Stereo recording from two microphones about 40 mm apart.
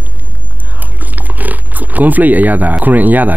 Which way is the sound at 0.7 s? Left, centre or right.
Right.